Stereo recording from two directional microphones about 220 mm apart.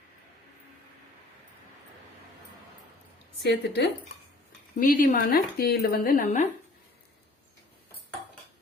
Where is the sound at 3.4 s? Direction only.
50° left (ahead or behind).